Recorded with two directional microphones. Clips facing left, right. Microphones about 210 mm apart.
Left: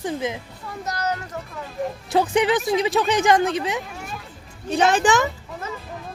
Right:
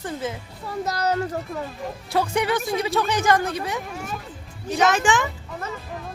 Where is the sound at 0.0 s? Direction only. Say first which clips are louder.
Left 3 dB; 15° left (ahead or behind).